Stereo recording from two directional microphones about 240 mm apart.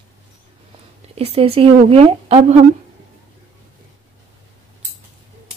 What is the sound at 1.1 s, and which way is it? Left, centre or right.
Speech, right.